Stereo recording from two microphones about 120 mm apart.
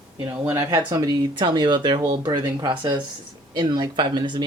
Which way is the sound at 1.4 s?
40° right (ahead or behind).